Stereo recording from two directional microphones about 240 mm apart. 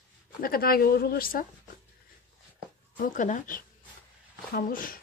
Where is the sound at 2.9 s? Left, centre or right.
Left.